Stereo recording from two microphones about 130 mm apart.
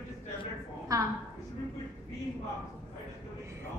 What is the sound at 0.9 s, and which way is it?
Speech, 25° right (ahead or behind).